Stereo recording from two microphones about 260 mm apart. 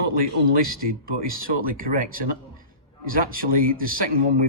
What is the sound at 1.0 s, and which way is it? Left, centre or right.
Speech, right.